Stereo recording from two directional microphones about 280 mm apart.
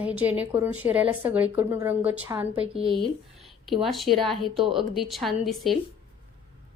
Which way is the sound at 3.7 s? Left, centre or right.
Centre.